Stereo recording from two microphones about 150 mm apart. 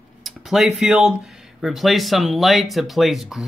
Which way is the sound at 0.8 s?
5° right (ahead or behind).